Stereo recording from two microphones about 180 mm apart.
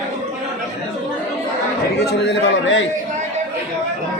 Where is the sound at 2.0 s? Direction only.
70° left (ahead or behind).